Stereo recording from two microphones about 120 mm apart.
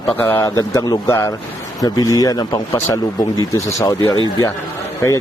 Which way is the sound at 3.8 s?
25° left (ahead or behind).